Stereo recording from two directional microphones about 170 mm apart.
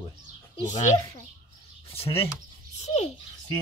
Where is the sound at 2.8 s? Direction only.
40° left (ahead or behind).